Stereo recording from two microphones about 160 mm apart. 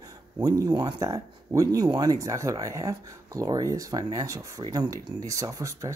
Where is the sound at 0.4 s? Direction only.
25° right (ahead or behind).